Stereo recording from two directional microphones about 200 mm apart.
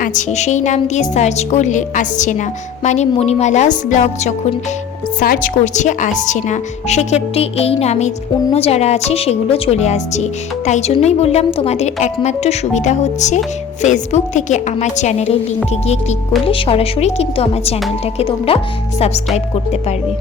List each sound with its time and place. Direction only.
0.0 s speech: 40° left (ahead or behind)